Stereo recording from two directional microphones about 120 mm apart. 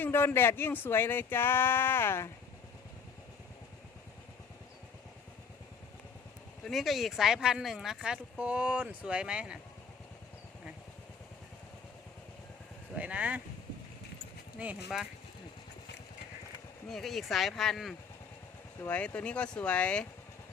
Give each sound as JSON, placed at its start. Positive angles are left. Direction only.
{"t": 0.0, "sound": "speech", "side_deg": 15}
{"t": 6.7, "sound": "speech", "side_deg": 0}
{"t": 13.0, "sound": "speech", "side_deg": -10}
{"t": 14.6, "sound": "speech", "side_deg": -5}
{"t": 16.9, "sound": "speech", "side_deg": 0}
{"t": 18.9, "sound": "speech", "side_deg": 10}